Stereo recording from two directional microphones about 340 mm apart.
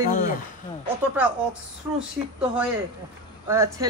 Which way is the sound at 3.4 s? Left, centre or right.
Centre.